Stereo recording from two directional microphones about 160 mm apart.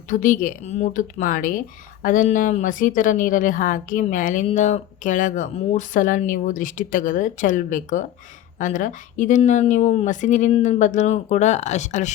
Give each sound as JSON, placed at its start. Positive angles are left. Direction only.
{"t": 0.1, "sound": "a woman's voice", "side_deg": 55}